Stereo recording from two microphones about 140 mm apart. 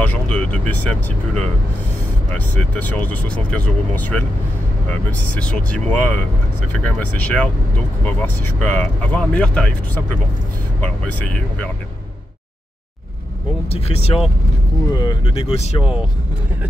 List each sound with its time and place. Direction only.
0.0 s speech: 10° left (ahead or behind)
5.3 s speech: 10° left (ahead or behind)
10.8 s speech: 10° left (ahead or behind)
13.7 s speech: 45° left (ahead or behind)
15.0 s speech: 30° left (ahead or behind)
15.3 s speech: 45° left (ahead or behind)